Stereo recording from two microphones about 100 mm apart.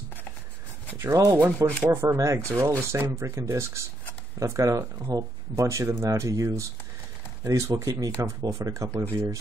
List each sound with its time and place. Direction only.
0.9 s speech: 30° right (ahead or behind)